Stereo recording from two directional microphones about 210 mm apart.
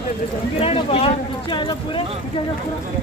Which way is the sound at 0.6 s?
30° left (ahead or behind).